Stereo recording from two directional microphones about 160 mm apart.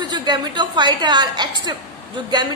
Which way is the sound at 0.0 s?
25° right (ahead or behind).